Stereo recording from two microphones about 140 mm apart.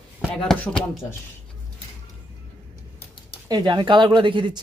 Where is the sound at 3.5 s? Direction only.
30° right (ahead or behind).